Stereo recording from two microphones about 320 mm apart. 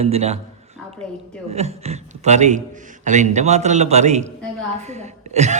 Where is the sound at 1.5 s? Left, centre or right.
Centre.